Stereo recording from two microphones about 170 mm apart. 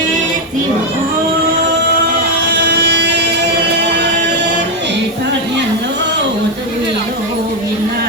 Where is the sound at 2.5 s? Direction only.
80° right.